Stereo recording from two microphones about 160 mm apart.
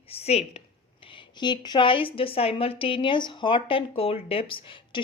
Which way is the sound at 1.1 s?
30° left (ahead or behind).